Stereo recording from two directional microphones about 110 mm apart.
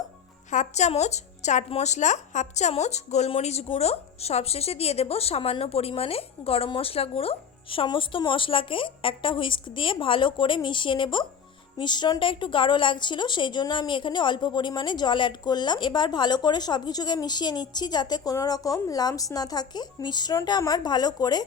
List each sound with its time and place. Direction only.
0.5 s a woman's voice: 90° left; by 21.4 s 35° left (ahead or behind)